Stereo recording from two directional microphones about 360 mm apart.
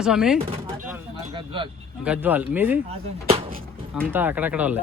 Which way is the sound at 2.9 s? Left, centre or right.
Centre.